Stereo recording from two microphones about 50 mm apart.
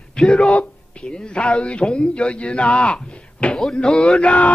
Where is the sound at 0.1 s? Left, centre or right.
Centre.